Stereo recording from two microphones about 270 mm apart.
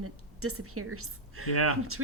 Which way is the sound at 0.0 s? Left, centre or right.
Right.